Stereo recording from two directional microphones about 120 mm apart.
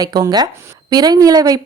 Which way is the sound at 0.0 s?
35° right (ahead or behind).